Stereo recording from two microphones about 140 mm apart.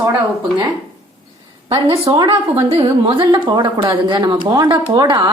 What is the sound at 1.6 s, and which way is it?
Speech, 45° right (ahead or behind).